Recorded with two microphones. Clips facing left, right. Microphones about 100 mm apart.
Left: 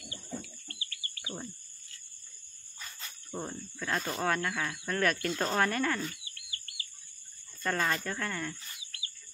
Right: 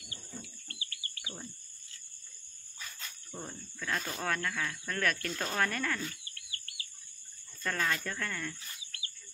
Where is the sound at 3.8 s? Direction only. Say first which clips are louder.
Left 4 dB; 10° left (ahead or behind).